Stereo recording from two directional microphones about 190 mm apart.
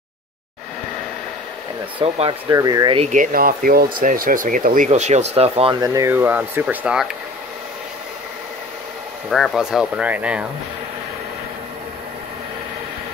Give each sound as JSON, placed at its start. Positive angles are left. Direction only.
{"t": 2.0, "sound": "speech", "side_deg": -30}
{"t": 2.5, "sound": "speech", "side_deg": -20}
{"t": 3.0, "sound": "speech", "side_deg": -40}
{"t": 5.8, "sound": "speech", "side_deg": -15}
{"t": 9.3, "sound": "speech", "side_deg": 0}